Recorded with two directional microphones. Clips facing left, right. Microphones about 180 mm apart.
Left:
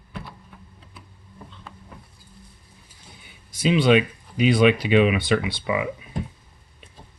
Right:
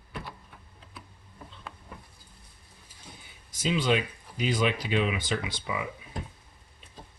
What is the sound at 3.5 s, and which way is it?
Speech, 70° left (ahead or behind).